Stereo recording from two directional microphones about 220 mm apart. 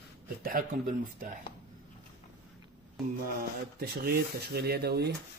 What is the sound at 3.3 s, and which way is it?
Speech, 45° right (ahead or behind).